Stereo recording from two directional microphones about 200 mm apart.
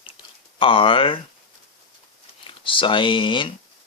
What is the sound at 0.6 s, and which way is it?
Speech, 25° left (ahead or behind).